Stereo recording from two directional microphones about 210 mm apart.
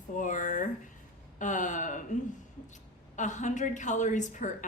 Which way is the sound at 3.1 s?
35° left (ahead or behind).